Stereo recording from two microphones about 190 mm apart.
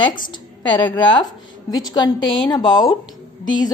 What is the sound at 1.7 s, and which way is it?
A woman's voice, 20° left (ahead or behind).